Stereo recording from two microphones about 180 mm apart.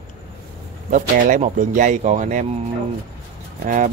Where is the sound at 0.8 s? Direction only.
45° right (ahead or behind).